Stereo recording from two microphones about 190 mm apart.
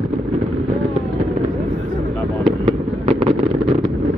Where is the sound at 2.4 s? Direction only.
30° right (ahead or behind).